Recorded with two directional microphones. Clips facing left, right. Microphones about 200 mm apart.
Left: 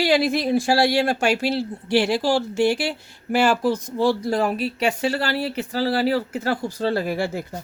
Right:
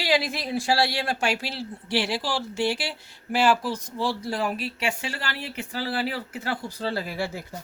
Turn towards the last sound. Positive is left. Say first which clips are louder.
# left 6 dB
turn(degrees=50)  # may be behind; listen again after turning